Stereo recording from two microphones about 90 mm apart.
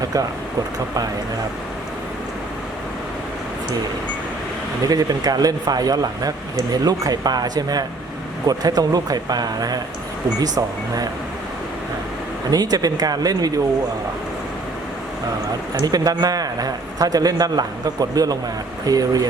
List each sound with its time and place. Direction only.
0.0 s speech: 45° right (ahead or behind)
4.9 s speech: 45° right (ahead or behind)
12.5 s speech: 45° right (ahead or behind)
15.8 s speech: 45° right (ahead or behind)